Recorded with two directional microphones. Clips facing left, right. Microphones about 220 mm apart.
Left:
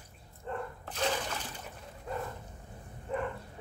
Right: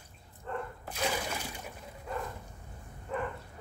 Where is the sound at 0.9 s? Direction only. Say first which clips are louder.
Left 1 dB; 10° right (ahead or behind).